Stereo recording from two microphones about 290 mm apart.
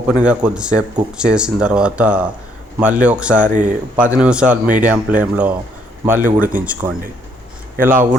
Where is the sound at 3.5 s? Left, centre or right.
Right.